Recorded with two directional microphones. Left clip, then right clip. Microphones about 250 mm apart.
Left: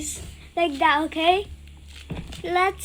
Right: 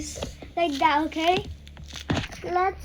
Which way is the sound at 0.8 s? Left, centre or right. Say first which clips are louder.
Left 2 dB; centre.